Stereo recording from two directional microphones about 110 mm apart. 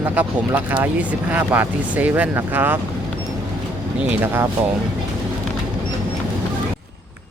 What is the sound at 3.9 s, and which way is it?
Speech, 15° right (ahead or behind).